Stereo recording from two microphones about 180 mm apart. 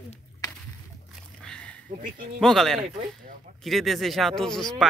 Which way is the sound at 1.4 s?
5° left (ahead or behind).